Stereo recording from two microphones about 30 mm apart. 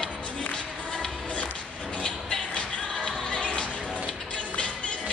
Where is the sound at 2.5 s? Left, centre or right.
Left.